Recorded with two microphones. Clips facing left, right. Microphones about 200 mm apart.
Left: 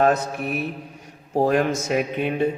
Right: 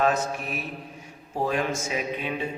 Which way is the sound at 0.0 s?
60° left (ahead or behind).